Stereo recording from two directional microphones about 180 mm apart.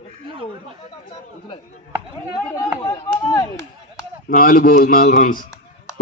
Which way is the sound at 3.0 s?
30° left (ahead or behind).